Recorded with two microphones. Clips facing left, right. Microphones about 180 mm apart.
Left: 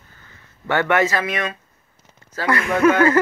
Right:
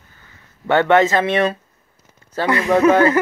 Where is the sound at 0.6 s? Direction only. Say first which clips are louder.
Right 5 dB; 20° right (ahead or behind).